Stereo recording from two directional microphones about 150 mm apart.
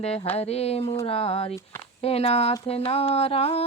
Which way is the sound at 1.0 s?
40° left (ahead or behind).